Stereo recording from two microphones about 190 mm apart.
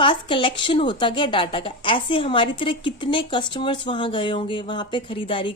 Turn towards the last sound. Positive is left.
turn(degrees=25)  # may be behind; listen again after turning